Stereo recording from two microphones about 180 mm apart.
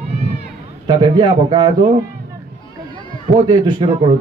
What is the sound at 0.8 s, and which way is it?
Speech, 25° right (ahead or behind).